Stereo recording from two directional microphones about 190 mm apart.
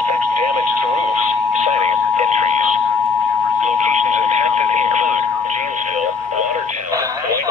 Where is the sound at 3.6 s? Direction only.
35° right (ahead or behind).